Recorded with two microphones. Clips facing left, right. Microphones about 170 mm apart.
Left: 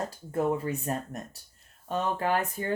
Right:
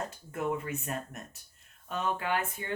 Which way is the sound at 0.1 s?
35° left (ahead or behind).